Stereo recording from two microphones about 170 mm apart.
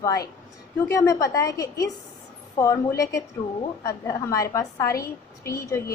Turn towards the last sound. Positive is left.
turn(degrees=15)  # may be behind; listen again after turning